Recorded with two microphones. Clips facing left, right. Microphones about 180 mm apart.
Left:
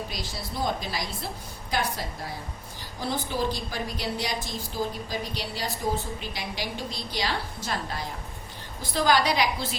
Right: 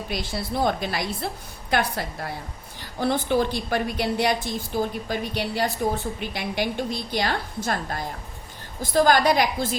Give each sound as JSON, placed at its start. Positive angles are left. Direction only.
{"t": 0.1, "sound": "a woman's voice", "side_deg": -60}